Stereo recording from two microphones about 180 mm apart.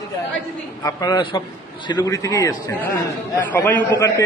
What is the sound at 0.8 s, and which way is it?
A man's voice, 20° left (ahead or behind).